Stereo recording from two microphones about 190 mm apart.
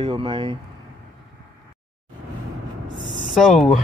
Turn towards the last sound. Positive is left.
turn(degrees=0)  # may be behind; listen again after turning